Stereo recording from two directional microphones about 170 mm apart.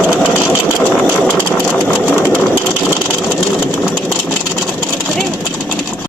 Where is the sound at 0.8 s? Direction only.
5° left (ahead or behind).